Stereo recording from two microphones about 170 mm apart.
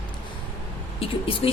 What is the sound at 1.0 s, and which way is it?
Speech, 35° left (ahead or behind).